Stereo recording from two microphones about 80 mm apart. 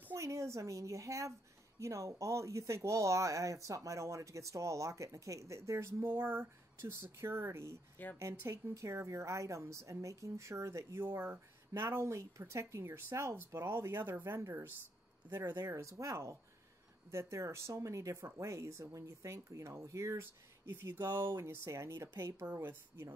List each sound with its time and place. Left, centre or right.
0.1 s a woman's voice: right
15.6 s speech: right